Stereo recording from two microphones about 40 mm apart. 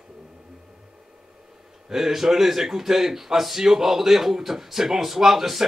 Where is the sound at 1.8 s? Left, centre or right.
Centre.